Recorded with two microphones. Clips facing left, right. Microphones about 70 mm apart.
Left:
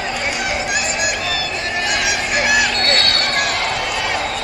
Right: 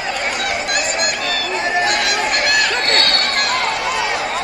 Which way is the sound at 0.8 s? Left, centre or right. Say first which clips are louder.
Right 1 dB; right.